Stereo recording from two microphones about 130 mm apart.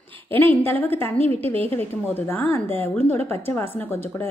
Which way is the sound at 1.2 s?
50° right (ahead or behind).